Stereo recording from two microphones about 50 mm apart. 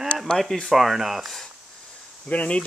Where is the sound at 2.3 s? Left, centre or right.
Left.